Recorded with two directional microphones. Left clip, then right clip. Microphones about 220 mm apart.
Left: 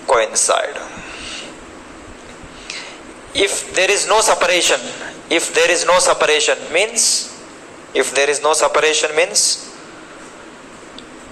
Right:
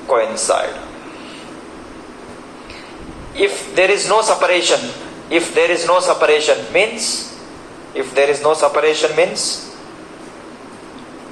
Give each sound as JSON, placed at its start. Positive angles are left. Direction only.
{"t": 0.1, "sound": "a man's voice", "side_deg": 50}
{"t": 3.3, "sound": "a man's voice", "side_deg": 50}